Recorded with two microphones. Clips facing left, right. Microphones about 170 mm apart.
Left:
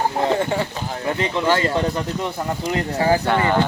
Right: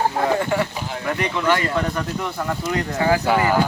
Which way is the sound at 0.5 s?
25° left (ahead or behind).